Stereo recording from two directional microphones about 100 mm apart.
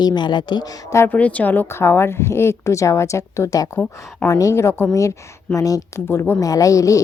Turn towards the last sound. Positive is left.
turn(degrees=35)  # may be behind; listen again after turning